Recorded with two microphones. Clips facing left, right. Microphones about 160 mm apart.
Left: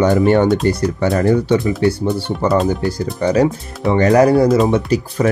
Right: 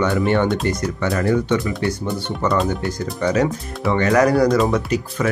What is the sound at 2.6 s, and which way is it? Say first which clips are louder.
Speech: left 5 dB; 35° left (ahead or behind).